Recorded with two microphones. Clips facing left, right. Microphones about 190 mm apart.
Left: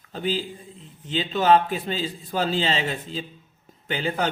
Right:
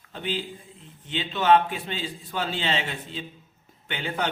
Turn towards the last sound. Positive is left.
turn(degrees=40)  # may be behind; listen again after turning